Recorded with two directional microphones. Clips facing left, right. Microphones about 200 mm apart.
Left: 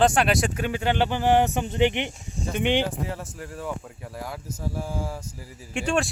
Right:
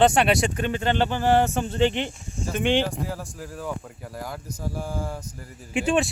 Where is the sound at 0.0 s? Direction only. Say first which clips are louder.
Right 2 dB; centre (ahead or behind); by 2.8 s 15° left (ahead or behind).